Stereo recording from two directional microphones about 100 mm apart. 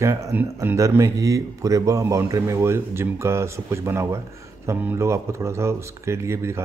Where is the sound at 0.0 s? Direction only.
30° right (ahead or behind).